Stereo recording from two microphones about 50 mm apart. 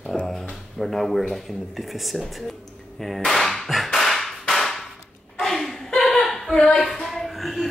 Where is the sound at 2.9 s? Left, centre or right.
Centre.